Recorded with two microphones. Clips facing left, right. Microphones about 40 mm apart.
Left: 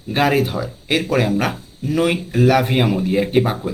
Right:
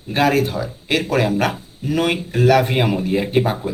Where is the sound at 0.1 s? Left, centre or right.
Centre.